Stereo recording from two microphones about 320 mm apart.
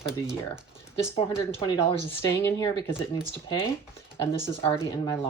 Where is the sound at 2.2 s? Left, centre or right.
Centre.